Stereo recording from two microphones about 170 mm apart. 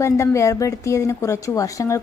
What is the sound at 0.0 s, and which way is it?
A woman's voice, 15° left (ahead or behind).